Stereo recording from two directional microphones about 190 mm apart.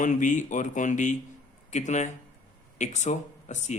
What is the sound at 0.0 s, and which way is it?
Speech, 40° left (ahead or behind).